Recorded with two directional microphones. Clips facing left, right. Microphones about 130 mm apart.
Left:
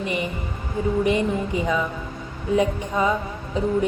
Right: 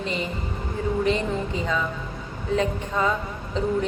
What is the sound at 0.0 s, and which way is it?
Music, 15° left (ahead or behind).